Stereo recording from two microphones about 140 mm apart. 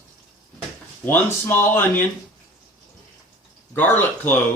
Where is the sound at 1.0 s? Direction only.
15° left (ahead or behind).